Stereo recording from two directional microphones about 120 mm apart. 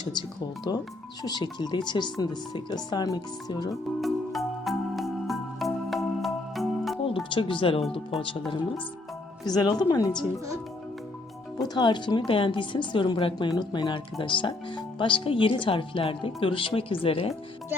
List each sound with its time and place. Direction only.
0.0 s speech: 40° left (ahead or behind)
3.7 s music: centre (ahead or behind)
7.3 s speech: 45° left (ahead or behind)
11.5 s speech: 35° left (ahead or behind); by 17.3 s 50° left (ahead or behind)